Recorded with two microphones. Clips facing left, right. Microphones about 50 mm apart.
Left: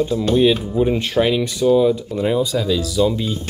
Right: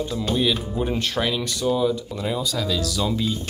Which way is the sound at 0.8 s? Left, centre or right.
Centre.